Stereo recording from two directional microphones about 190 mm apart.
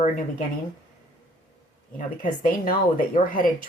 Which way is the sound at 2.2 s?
45° left (ahead or behind).